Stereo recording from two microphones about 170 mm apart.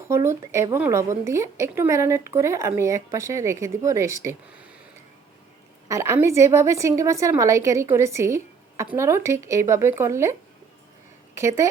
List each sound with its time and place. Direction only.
0.1 s speech: 15° right (ahead or behind)
5.9 s speech: 15° right (ahead or behind)
11.3 s speech: 15° right (ahead or behind)